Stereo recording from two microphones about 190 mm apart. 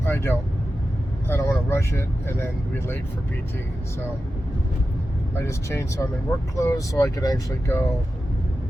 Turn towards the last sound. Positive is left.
turn(degrees=15)  # may be behind; listen again after turning